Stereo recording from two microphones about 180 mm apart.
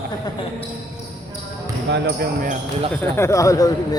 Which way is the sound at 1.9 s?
75° right (ahead or behind).